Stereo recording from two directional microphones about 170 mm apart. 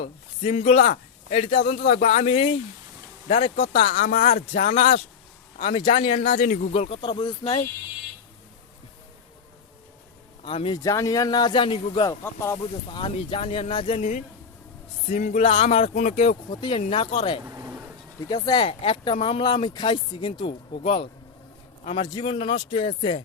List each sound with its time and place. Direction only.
0.0 s a man's voice: 35° left (ahead or behind)
3.8 s speech: 50° left (ahead or behind); by 7.6 s 30° left (ahead or behind)
10.4 s speech: 30° left (ahead or behind)
10.8 s speech: 20° left (ahead or behind)
13.0 s speech: 35° left (ahead or behind)
13.9 s speech: 45° left (ahead or behind)
16.5 s speech: 30° left (ahead or behind)
17.4 s vehicle: 15° right (ahead or behind)
18.3 s speech: 25° left (ahead or behind)
18.6 s speech: 35° left (ahead or behind)